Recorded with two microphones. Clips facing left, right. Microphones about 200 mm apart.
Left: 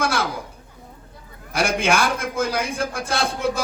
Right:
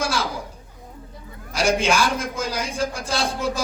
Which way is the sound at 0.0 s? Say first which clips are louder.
Left 2 dB; 55° left (ahead or behind).